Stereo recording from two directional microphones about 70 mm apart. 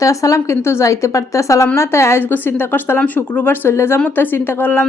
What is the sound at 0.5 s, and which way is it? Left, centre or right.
A woman's voice, left.